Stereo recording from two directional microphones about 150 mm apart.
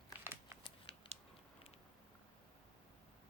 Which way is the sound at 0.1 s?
15° right (ahead or behind).